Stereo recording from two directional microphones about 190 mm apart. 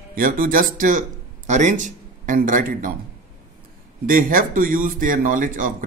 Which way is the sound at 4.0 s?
45° right (ahead or behind).